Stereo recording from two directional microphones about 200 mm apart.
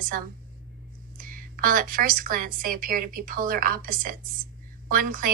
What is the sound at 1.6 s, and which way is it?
Speech, 45° right (ahead or behind).